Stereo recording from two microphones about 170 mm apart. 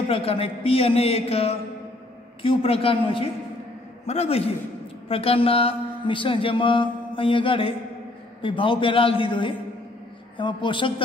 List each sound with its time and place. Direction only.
0.1 s mantra: 35° left (ahead or behind)
10.3 s a man's voice: 30° left (ahead or behind)